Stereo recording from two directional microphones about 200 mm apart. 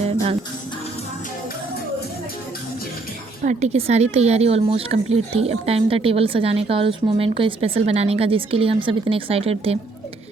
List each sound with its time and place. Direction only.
0.0 s music: 30° right (ahead or behind)
3.4 s speech: 35° right (ahead or behind)